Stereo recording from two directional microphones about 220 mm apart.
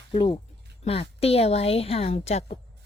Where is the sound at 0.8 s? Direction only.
25° left (ahead or behind).